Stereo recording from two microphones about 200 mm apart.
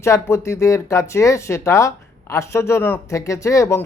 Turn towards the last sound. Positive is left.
turn(degrees=15)  # may be behind; listen again after turning